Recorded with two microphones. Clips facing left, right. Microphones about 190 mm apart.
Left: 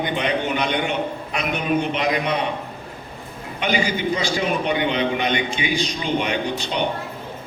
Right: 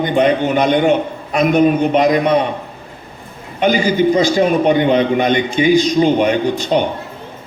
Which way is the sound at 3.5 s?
40° right (ahead or behind).